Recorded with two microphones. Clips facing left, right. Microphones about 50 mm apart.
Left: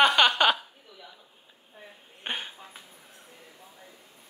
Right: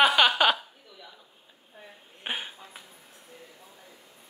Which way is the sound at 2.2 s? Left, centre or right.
Centre.